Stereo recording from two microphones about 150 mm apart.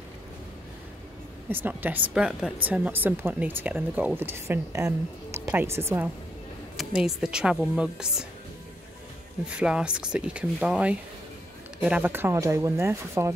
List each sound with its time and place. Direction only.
1.5 s speech: 15° right (ahead or behind)
6.8 s speech: 5° right (ahead or behind)
9.5 s speech: 5° right (ahead or behind)